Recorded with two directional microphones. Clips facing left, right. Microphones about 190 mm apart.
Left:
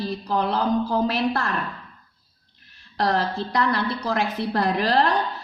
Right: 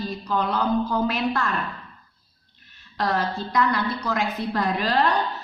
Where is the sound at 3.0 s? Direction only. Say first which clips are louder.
Left 2 dB; 35° left (ahead or behind).